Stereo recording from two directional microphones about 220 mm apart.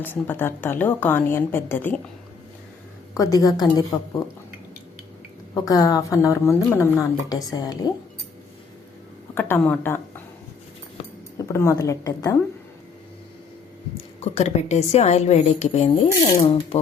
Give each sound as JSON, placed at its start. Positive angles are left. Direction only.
{"t": 0.0, "sound": "a woman's voice", "side_deg": 10}
{"t": 3.2, "sound": "a woman's voice", "side_deg": 15}
{"t": 5.6, "sound": "a woman's voice", "side_deg": 15}
{"t": 9.3, "sound": "speech", "side_deg": 10}
{"t": 11.4, "sound": "a woman's voice", "side_deg": 15}
{"t": 14.2, "sound": "a woman's voice", "side_deg": 30}